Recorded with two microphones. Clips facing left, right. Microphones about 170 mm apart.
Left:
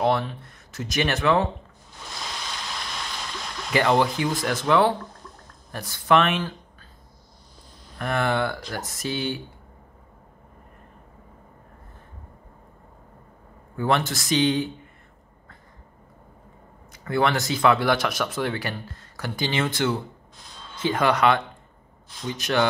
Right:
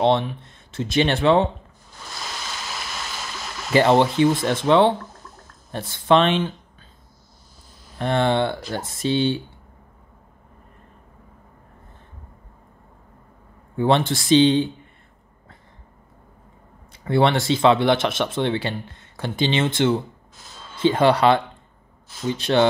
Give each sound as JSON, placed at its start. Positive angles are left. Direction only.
{"t": 0.0, "sound": "speech", "side_deg": -20}
{"t": 2.0, "sound": "a sound", "side_deg": -5}
{"t": 3.7, "sound": "speech", "side_deg": -25}
{"t": 8.0, "sound": "speech", "side_deg": -25}
{"t": 13.7, "sound": "speech", "side_deg": -25}
{"t": 16.9, "sound": "speech", "side_deg": -30}
{"t": 20.3, "sound": "a sound", "side_deg": -5}
{"t": 20.7, "sound": "speech", "side_deg": -30}